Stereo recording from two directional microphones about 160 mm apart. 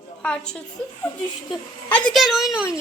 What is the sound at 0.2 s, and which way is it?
Speech, 5° left (ahead or behind).